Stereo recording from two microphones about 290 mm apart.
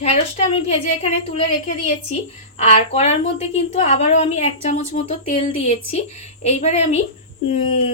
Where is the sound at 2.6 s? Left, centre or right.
Left.